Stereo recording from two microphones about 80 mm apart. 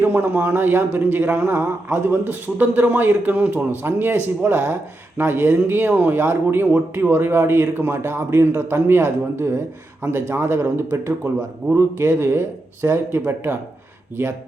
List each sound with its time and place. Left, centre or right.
0.0 s speech: right